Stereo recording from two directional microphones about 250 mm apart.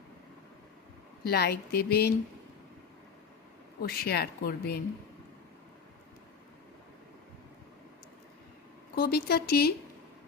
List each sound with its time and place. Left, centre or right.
1.2 s a woman's voice: left
3.8 s a woman's voice: left
9.0 s a woman's voice: left